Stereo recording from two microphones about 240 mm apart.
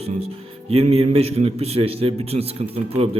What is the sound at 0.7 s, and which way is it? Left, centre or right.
A man's voice, right.